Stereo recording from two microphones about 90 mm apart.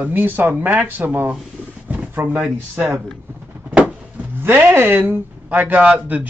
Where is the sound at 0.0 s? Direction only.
20° right (ahead or behind).